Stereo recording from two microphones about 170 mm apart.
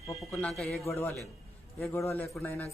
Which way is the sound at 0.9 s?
15° left (ahead or behind).